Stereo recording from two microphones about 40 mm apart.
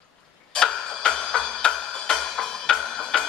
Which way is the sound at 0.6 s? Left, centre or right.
Centre.